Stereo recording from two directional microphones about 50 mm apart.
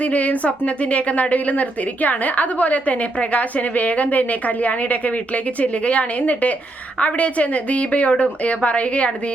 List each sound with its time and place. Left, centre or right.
0.0 s a woman's voice: left